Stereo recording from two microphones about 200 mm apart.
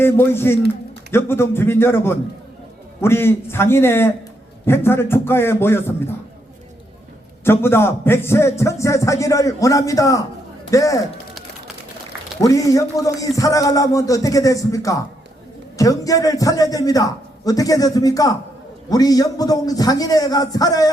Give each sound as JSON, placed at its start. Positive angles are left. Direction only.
{"t": 0.0, "sound": "a man's voice", "side_deg": 10}
{"t": 7.4, "sound": "a man's voice", "side_deg": 10}
{"t": 12.4, "sound": "a man's voice", "side_deg": 15}